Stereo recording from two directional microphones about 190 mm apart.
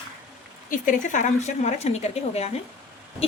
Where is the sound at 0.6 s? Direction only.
40° left (ahead or behind).